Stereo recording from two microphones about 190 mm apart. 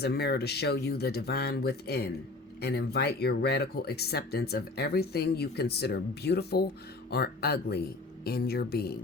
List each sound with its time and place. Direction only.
0.0 s speech: 60° left (ahead or behind)